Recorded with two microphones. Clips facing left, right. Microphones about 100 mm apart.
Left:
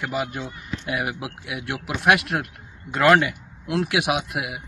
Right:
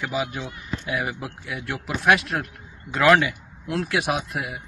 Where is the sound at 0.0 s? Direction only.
Centre (ahead or behind).